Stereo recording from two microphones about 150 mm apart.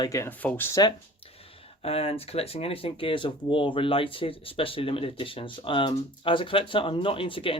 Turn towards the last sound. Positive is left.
turn(degrees=35)  # may be behind; listen again after turning